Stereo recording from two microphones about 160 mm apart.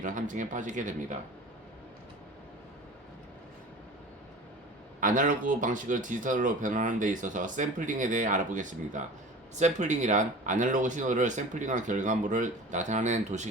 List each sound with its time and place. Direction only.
0.0 s speech: 55° right (ahead or behind)
4.9 s speech: 55° right (ahead or behind)